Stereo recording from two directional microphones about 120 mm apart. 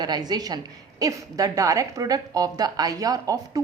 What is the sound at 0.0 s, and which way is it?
A woman's voice, 35° right (ahead or behind).